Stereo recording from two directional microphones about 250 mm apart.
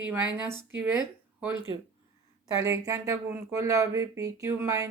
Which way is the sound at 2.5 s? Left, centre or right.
Centre.